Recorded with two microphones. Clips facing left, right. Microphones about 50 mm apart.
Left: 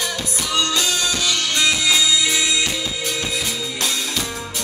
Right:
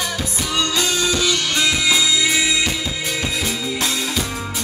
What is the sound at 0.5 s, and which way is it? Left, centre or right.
Music, centre.